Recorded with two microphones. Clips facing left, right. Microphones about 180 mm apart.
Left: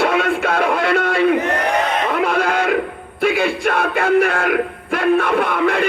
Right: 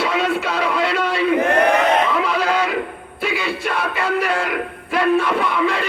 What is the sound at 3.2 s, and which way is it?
Speech, 50° left (ahead or behind).